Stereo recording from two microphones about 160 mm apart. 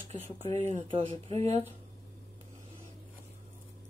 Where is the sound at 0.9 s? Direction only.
35° right (ahead or behind).